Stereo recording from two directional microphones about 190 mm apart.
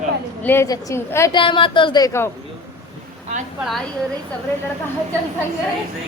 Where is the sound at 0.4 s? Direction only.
15° left (ahead or behind).